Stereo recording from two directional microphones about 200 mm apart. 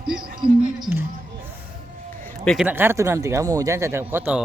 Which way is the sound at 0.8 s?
10° right (ahead or behind).